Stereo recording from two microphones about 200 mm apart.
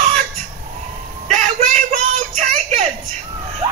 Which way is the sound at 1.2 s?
35° right (ahead or behind).